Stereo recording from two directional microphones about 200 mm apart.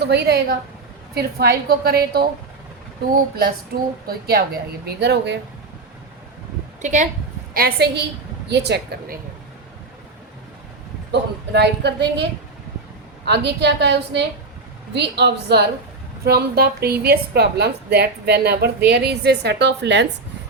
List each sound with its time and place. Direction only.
0.0 s a woman's voice: 55° right (ahead or behind)
4.0 s a woman's voice: 50° right (ahead or behind)
6.8 s a woman's voice: 40° right (ahead or behind)
7.5 s a woman's voice: 50° right (ahead or behind)
11.1 s a woman's voice: 55° right (ahead or behind)